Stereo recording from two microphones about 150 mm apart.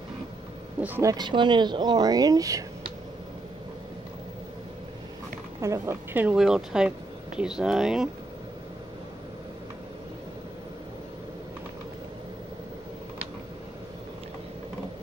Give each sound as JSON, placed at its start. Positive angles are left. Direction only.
{"t": 0.7, "sound": "speech", "side_deg": -10}
{"t": 1.0, "sound": "speech", "side_deg": -30}
{"t": 5.6, "sound": "speech", "side_deg": -20}